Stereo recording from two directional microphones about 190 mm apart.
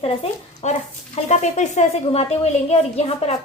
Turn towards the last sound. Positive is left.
turn(degrees=35)  # may be behind; listen again after turning